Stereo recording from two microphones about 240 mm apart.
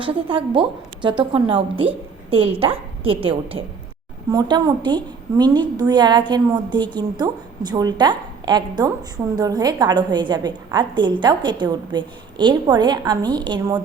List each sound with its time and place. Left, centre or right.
0.0 s a woman's voice: right